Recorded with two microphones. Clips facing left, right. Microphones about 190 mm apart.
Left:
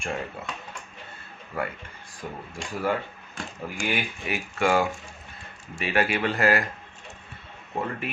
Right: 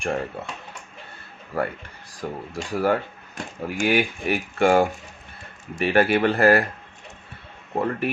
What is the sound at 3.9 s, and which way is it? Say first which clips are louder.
Speech: right 8 dB; 55° right (ahead or behind).